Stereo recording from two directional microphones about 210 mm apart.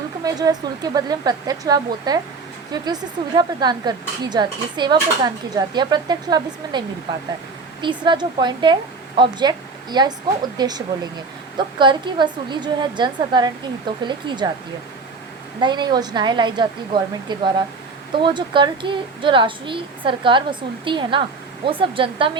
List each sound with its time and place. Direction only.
0.3 s a woman's voice: 20° right (ahead or behind)
15.6 s speech: 20° right (ahead or behind)